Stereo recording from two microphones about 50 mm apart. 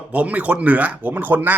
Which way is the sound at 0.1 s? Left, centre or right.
Right.